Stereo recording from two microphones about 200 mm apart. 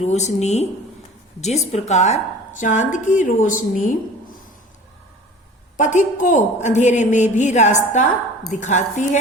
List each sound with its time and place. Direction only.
0.0 s a woman's voice: 35° left (ahead or behind)
5.7 s a woman's voice: 40° left (ahead or behind)